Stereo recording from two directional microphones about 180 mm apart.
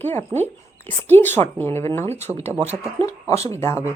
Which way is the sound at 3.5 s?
15° left (ahead or behind).